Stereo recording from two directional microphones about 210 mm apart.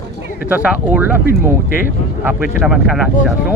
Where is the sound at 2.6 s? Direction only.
5° right (ahead or behind).